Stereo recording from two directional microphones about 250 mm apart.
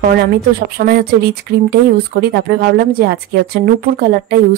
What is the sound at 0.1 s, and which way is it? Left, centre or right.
Speech, right.